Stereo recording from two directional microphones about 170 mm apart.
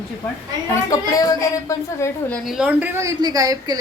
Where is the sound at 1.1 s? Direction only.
20° left (ahead or behind).